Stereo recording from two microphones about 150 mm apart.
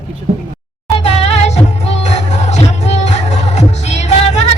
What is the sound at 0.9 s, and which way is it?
Music, 45° left (ahead or behind).